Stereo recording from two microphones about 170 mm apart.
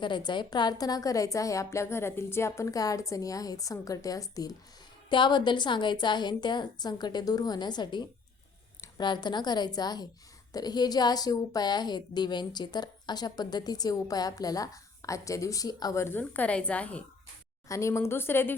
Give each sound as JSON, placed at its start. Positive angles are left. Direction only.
{"t": 0.0, "sound": "a woman's voice", "side_deg": 25}